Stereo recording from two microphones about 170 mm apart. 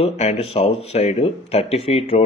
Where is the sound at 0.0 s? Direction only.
40° left (ahead or behind).